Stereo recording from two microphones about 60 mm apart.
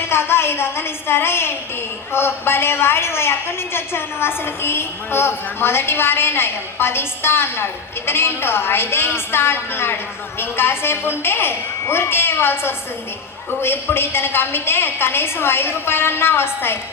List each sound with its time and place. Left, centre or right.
0.1 s a woman's voice: left